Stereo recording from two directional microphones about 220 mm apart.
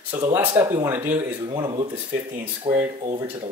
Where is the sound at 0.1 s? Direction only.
10° right (ahead or behind); by 2.8 s 30° right (ahead or behind).